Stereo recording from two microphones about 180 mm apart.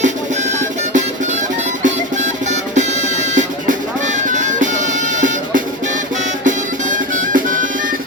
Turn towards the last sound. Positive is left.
turn(degrees=-50)  # may be behind; listen again after turning